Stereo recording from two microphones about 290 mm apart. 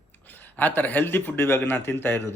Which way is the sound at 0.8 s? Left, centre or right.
Centre.